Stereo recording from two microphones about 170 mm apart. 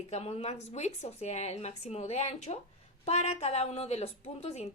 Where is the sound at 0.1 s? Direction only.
40° left (ahead or behind).